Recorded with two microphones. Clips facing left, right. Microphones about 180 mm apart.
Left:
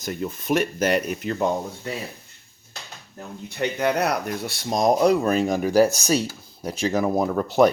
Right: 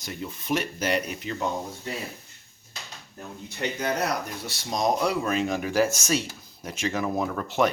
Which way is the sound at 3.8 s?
65° left (ahead or behind).